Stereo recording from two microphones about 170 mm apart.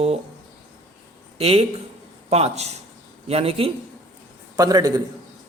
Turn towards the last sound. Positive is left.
turn(degrees=-25)  # may be behind; listen again after turning